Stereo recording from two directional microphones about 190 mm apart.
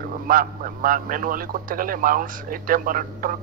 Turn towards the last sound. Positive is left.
turn(degrees=-45)  # may be behind; listen again after turning